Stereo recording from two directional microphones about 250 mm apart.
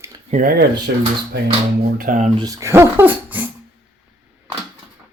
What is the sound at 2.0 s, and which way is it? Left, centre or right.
Speech, right.